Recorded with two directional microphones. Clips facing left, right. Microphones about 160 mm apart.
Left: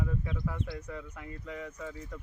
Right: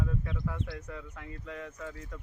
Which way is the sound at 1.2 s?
10° left (ahead or behind).